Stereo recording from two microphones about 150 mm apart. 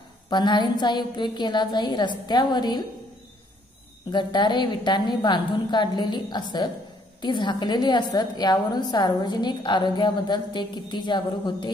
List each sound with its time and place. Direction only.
0.3 s a woman's voice: 30° left (ahead or behind)
4.1 s a woman's voice: 30° left (ahead or behind)